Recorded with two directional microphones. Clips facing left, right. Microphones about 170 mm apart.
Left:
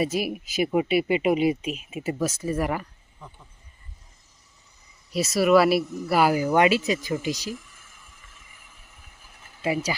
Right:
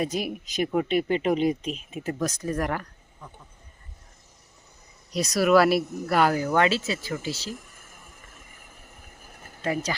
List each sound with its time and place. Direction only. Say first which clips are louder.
0.0 s speech: left 2 dB; 5° left (ahead or behind)
5.1 s speech: left 1 dB; 5° left (ahead or behind)
7.5 s a sound: left 2 dB; 45° right (ahead or behind)